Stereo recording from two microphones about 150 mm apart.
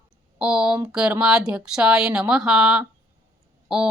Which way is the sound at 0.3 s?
5° right (ahead or behind).